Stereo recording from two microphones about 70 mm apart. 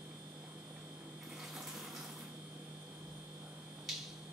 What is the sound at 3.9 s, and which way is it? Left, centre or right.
Finger snapping, centre.